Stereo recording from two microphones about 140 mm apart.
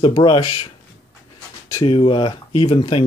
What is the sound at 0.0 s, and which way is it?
Speech, 35° left (ahead or behind).